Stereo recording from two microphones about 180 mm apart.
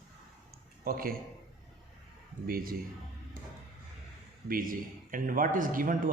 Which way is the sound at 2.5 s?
55° right (ahead or behind).